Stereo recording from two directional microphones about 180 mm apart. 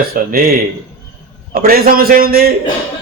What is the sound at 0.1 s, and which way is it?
Speech, 55° right (ahead or behind).